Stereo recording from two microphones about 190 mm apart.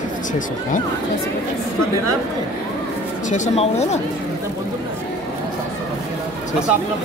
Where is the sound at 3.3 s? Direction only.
35° left (ahead or behind).